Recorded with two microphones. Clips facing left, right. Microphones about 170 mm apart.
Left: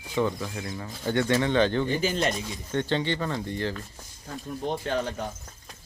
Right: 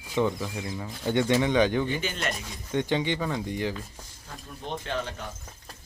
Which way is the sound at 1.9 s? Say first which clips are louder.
Left 5 dB; 35° left (ahead or behind).